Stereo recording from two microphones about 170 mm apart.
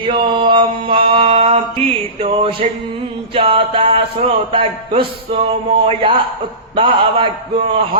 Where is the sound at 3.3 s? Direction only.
30° right (ahead or behind).